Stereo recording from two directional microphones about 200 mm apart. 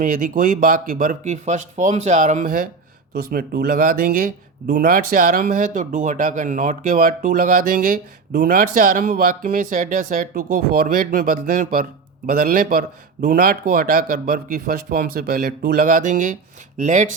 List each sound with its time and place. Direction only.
0.0 s speech: 45° right (ahead or behind)